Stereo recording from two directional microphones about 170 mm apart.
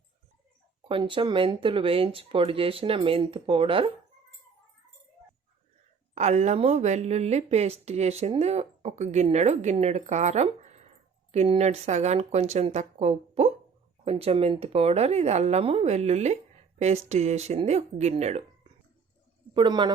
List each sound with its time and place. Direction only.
0.9 s a woman's voice: 30° right (ahead or behind)
6.1 s a woman's voice: 45° right (ahead or behind)
19.5 s a man's voice: 25° right (ahead or behind)